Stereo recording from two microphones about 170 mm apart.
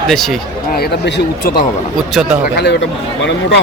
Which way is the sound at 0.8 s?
80° left.